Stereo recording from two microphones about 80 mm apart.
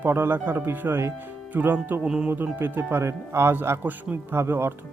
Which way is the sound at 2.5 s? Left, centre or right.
Right.